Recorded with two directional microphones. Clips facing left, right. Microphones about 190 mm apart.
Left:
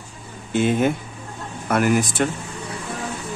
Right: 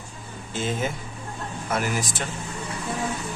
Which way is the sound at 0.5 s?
60° left (ahead or behind).